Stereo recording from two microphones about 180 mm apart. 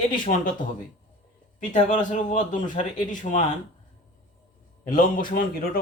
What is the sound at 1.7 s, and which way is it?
Speech, 45° left (ahead or behind).